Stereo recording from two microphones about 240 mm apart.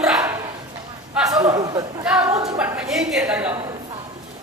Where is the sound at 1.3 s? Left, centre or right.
Centre.